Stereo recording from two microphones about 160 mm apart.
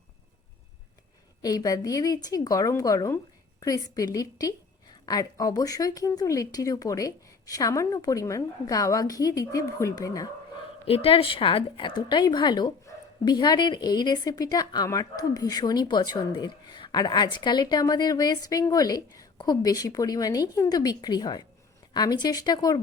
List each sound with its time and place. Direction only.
1.4 s a woman's voice: 25° left (ahead or behind)
10.8 s a woman's voice: 35° left (ahead or behind)